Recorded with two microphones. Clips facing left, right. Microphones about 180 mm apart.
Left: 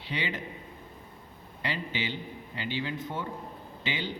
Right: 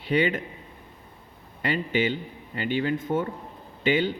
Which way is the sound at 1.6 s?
55° right (ahead or behind).